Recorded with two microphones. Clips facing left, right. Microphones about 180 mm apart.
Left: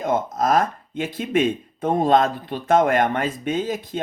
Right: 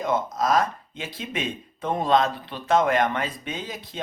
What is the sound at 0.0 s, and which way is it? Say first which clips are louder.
Speech: left 3 dB; 50° left (ahead or behind).